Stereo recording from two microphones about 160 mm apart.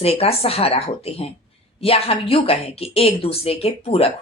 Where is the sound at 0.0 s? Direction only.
40° left (ahead or behind).